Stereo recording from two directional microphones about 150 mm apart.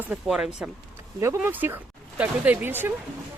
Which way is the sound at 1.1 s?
15° right (ahead or behind).